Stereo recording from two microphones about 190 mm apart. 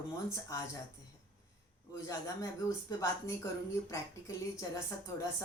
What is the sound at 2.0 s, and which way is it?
Speech, 15° left (ahead or behind).